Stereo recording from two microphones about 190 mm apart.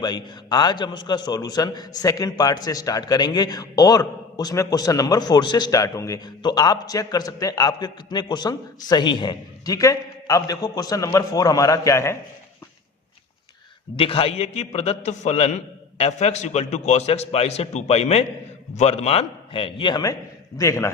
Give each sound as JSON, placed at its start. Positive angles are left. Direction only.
{"t": 0.0, "sound": "a man's voice", "side_deg": 20}
{"t": 13.9, "sound": "a man's voice", "side_deg": 30}